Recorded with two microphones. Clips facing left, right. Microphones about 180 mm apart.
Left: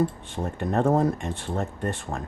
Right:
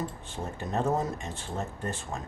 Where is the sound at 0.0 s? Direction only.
60° left (ahead or behind).